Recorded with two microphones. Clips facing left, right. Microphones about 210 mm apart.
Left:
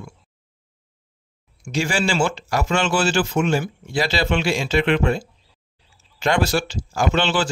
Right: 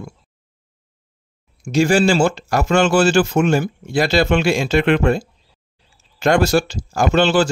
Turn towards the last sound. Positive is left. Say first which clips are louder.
# right 5 dB
turn(degrees=-40)  # may be behind; listen again after turning